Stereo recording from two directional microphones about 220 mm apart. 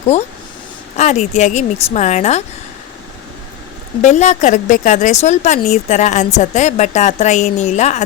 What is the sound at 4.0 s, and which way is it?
A woman's voice, 30° left (ahead or behind).